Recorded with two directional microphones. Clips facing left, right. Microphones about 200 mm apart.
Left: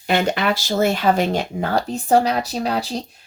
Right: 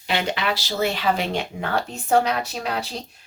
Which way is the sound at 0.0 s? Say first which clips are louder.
Left 5 dB; 45° left (ahead or behind).